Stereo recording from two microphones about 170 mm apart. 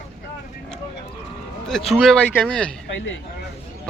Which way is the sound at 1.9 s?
Centre (ahead or behind).